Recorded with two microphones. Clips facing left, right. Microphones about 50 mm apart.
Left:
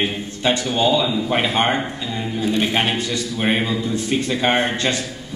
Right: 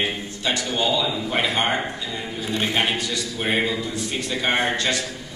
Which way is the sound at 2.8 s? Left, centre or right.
Left.